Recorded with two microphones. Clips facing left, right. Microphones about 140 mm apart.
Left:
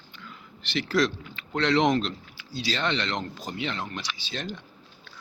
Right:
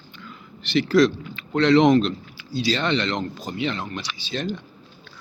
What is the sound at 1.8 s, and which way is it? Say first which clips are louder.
Speech: right 6 dB; 90° right.